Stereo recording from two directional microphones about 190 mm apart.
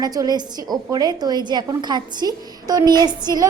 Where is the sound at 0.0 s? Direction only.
20° right (ahead or behind).